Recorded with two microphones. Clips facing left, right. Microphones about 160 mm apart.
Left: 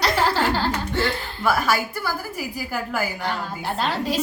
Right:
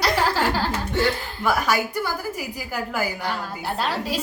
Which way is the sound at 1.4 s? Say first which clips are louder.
Even; 15° right (ahead or behind).